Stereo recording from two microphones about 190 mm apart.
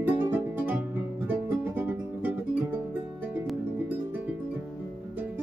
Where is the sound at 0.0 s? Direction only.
10° right (ahead or behind).